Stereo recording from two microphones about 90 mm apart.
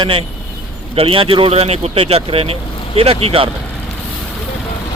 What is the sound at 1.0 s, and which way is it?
Speech, 90° right.